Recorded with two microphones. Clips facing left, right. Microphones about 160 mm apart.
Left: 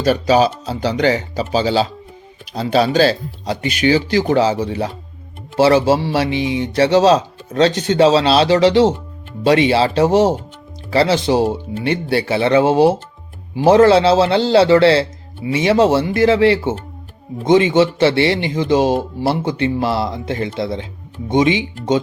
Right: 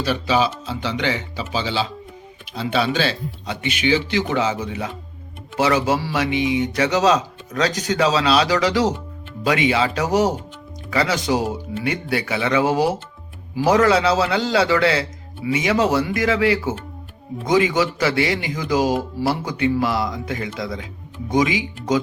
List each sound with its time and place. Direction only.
0.0 s speech: 45° left (ahead or behind); by 22.0 s 25° left (ahead or behind)